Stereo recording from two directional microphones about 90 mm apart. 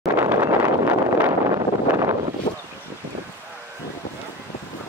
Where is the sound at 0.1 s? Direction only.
30° right (ahead or behind).